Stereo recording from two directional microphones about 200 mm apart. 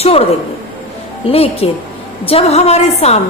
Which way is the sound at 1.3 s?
30° left (ahead or behind).